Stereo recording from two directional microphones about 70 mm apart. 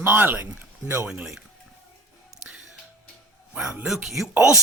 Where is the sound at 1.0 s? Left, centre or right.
Centre.